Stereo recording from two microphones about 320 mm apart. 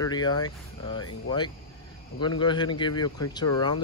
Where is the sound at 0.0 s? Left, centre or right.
Centre.